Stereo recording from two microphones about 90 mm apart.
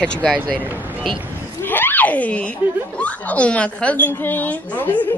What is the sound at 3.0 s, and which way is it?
A woman's voice, 15° left (ahead or behind).